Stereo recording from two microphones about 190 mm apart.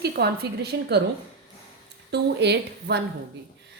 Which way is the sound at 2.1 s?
65° right (ahead or behind).